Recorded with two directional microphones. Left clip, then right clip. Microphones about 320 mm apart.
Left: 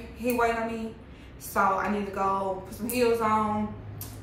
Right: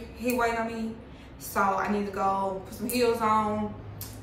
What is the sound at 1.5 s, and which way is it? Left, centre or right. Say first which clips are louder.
A woman's voice: left 1 dB; centre.